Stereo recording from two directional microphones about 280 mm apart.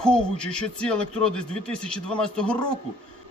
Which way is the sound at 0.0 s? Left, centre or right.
Centre.